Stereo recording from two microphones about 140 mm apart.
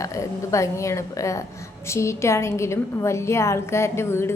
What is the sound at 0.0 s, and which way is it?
A woman's voice, 20° left (ahead or behind).